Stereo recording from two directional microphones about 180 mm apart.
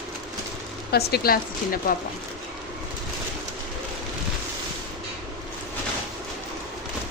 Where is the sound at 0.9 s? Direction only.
60° left (ahead or behind).